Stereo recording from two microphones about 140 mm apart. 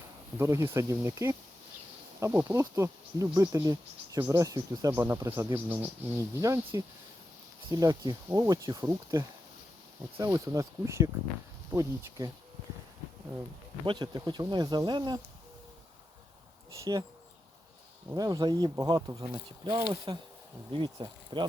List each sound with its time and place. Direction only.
0.3 s speech: 20° right (ahead or behind)
13.8 s speech: 30° right (ahead or behind)
18.2 s speech: 25° right (ahead or behind)